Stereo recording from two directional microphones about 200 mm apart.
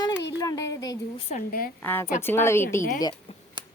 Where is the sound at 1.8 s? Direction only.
10° left (ahead or behind).